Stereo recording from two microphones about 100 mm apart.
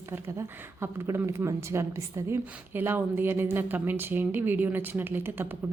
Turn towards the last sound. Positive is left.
turn(degrees=-20)  # may be behind; listen again after turning